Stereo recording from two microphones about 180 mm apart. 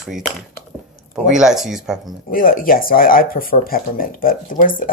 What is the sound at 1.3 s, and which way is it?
Speech, 5° right (ahead or behind).